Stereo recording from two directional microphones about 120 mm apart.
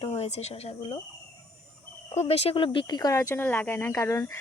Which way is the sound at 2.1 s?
60° left (ahead or behind).